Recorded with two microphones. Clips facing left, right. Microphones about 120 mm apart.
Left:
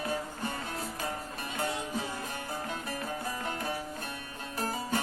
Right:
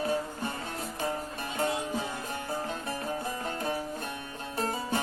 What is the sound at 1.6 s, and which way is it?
Music, 25° right (ahead or behind).